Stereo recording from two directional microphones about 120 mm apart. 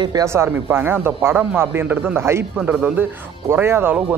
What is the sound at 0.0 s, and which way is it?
Speech, 35° right (ahead or behind).